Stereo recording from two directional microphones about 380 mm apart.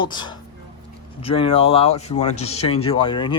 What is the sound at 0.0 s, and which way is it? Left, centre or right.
Speech, centre.